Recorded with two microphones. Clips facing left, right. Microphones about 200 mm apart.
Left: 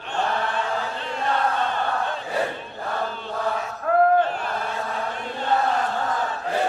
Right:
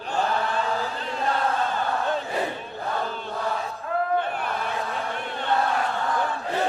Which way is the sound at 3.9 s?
65° left (ahead or behind).